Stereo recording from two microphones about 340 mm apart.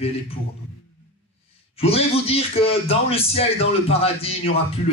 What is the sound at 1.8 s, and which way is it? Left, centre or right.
Speech, centre.